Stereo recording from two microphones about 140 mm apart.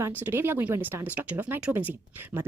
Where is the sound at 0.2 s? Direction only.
15° right (ahead or behind).